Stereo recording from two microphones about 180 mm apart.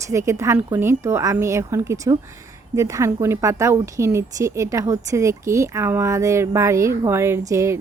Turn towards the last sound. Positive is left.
turn(degrees=-15)  # may be behind; listen again after turning